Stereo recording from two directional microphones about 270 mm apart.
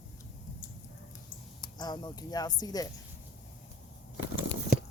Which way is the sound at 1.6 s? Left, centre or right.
Centre.